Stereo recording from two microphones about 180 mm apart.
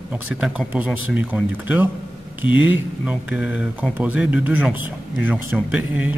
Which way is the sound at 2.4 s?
90° left.